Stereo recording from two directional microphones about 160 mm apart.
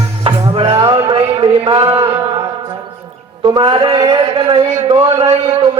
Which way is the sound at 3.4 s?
30° right (ahead or behind).